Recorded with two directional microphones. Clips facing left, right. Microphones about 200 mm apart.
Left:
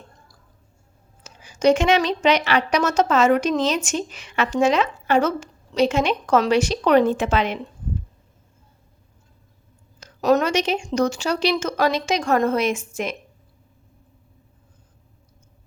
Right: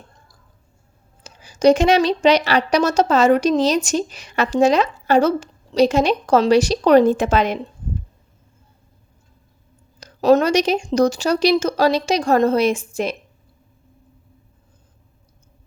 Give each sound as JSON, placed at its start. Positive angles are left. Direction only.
{"t": 1.2, "sound": "a woman's voice", "side_deg": -35}
{"t": 10.0, "sound": "a woman's voice", "side_deg": -30}